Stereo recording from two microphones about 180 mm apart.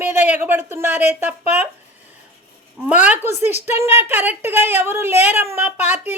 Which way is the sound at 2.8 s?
5° right (ahead or behind).